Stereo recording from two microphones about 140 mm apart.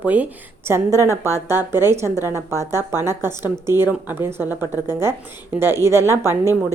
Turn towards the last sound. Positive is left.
turn(degrees=-20)  # may be behind; listen again after turning